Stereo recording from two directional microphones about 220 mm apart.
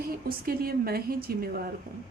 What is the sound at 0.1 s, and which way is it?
A woman's voice, 40° right (ahead or behind).